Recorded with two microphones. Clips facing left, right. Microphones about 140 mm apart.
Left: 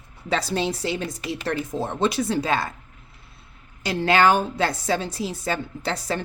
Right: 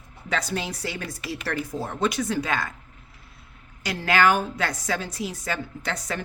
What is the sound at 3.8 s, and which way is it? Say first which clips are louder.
A woman's voice: left 3 dB; 25° left (ahead or behind).